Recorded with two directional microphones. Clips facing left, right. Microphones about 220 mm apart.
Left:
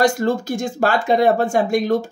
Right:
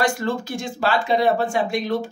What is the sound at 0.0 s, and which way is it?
Speech, 45° left (ahead or behind).